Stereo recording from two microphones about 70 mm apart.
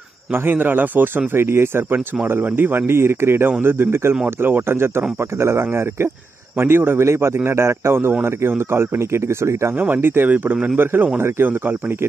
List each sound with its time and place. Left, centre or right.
0.3 s a man's voice: right
9.8 s a man's voice: right